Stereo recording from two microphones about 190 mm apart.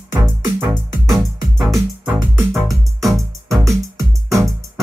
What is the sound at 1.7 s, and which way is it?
Music, centre (ahead or behind).